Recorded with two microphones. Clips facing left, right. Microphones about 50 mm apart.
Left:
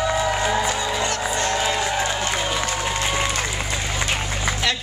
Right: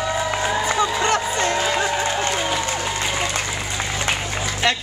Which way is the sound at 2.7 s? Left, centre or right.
Centre.